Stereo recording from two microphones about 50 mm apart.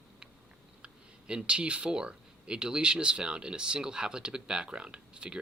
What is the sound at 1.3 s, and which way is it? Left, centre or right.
Speech, centre.